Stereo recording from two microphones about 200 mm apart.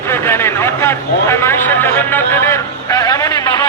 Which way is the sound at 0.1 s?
10° left (ahead or behind).